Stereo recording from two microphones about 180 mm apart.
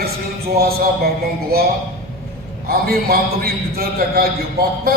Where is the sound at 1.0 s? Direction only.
60° right (ahead or behind).